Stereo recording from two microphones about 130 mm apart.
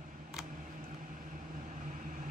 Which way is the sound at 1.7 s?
75° right (ahead or behind).